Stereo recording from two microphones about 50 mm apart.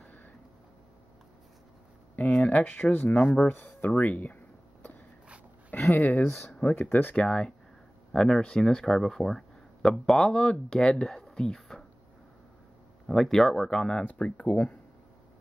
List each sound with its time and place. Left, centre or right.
0.0 s a sound: left
2.1 s speech: left
2.6 s speech: left
3.9 s speech: left
5.9 s speech: left
7.2 s speech: centre
10.2 s speech: centre
13.1 s speech: centre; by 14.8 s left